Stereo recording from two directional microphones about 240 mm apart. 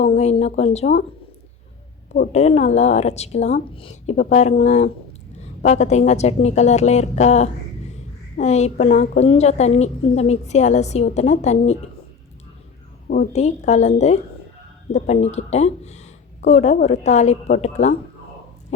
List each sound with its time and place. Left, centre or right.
0.0 s a woman's voice: left
2.1 s a woman's voice: left
13.1 s a woman's voice: left